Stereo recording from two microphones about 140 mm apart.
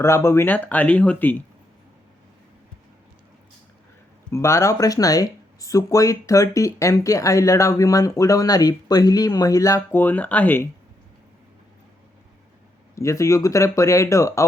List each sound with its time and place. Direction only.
0.0 s speech: 20° left (ahead or behind)
4.3 s speech: 20° left (ahead or behind)
9.9 s speech: 10° left (ahead or behind)
13.0 s speech: 20° left (ahead or behind)